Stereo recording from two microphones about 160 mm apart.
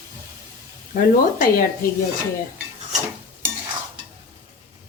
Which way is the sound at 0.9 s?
60° left (ahead or behind).